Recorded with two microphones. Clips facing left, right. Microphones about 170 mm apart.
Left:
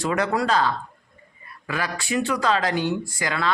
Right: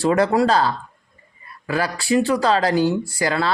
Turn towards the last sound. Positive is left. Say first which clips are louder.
# right 6 dB
turn(degrees=-35)  # may be behind; listen again after turning